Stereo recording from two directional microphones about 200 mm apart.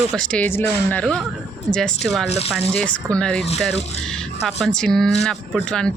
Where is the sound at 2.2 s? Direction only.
30° left (ahead or behind).